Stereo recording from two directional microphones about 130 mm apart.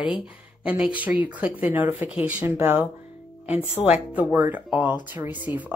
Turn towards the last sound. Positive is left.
turn(degrees=-15)  # may be behind; listen again after turning